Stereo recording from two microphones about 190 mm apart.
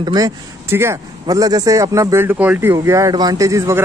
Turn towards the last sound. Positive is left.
turn(degrees=-15)  # may be behind; listen again after turning